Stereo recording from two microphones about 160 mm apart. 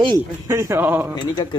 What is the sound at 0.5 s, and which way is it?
Speech, 15° right (ahead or behind).